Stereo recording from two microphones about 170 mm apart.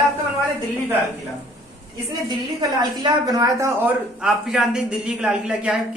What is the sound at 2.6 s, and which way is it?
A woman's voice, 25° right (ahead or behind).